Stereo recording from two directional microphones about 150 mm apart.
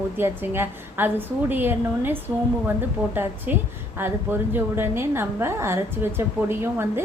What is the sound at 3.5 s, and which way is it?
A woman's voice, 10° right (ahead or behind).